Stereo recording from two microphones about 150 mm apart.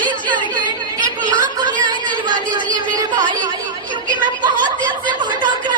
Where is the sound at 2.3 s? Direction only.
60° right (ahead or behind).